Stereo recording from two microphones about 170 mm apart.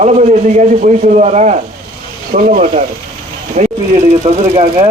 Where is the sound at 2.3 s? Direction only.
55° right (ahead or behind).